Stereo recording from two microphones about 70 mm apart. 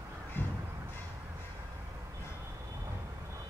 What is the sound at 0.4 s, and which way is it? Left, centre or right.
Crow, left.